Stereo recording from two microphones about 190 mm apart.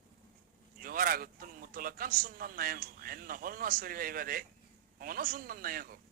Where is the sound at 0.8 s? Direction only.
50° right (ahead or behind).